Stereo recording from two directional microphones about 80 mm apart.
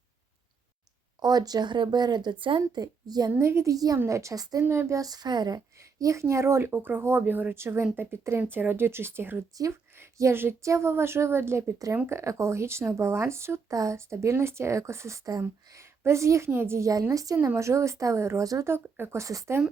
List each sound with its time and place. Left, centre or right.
1.2 s speech: right
3.3 s speech: right
3.9 s speech: right
4.9 s speech: right
5.5 s speech: right
6.7 s speech: right
17.3 s speech: right
18.7 s speech: right